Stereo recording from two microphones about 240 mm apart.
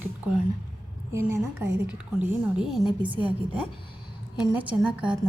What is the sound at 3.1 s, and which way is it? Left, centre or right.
Speech, right.